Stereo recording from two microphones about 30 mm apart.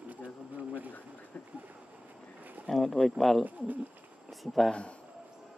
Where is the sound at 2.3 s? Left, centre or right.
Right.